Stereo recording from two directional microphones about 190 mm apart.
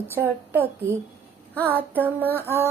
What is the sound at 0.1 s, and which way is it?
Child singing, 10° right (ahead or behind).